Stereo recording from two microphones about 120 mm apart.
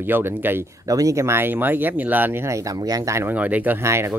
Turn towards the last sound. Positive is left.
turn(degrees=-20)  # may be behind; listen again after turning